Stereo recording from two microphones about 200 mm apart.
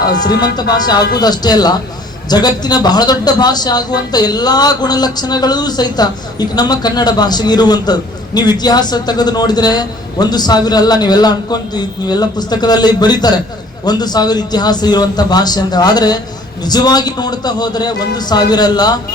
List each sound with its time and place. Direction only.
0.0 s a man's voice: 20° left (ahead or behind)